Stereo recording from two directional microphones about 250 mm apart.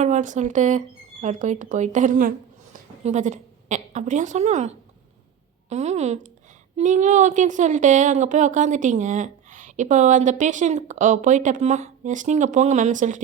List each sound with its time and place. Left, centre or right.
0.0 s a woman's voice: right